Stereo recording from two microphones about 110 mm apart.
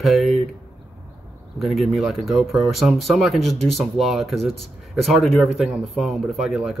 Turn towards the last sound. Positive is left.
turn(degrees=0)  # may be behind; listen again after turning